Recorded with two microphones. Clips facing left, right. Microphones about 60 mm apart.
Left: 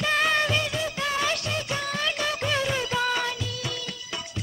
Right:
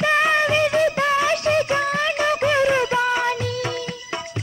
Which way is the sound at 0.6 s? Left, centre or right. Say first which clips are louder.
Right 10 dB; right.